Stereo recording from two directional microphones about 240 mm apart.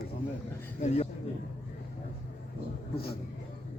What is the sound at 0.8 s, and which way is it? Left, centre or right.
Speech, left.